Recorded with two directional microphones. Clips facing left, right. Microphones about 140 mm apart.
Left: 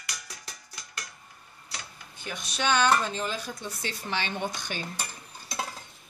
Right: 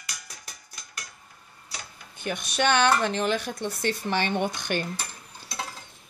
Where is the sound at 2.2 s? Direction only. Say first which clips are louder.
Right 6 dB; 60° right (ahead or behind).